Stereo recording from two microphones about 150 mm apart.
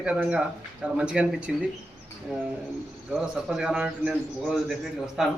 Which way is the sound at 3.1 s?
5° right (ahead or behind).